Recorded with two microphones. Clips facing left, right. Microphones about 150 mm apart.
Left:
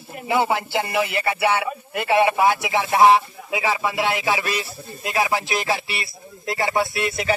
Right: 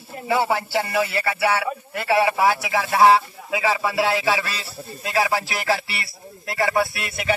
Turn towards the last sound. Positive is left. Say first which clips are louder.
# left 2 dB
turn(degrees=25)  # may be behind; listen again after turning